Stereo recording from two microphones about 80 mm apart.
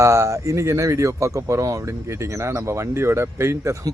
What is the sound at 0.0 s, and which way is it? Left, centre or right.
Speech, right.